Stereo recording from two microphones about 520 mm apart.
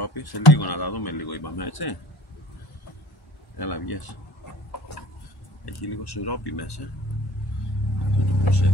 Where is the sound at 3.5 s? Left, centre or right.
Left.